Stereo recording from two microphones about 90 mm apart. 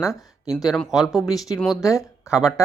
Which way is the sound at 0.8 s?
Centre (ahead or behind).